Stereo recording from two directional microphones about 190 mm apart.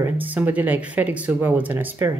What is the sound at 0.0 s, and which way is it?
Speech, 10° right (ahead or behind).